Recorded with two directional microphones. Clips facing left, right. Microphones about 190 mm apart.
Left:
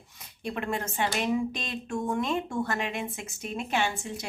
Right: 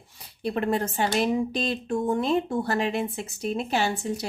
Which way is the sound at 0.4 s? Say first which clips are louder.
Right 6 dB; 35° right (ahead or behind).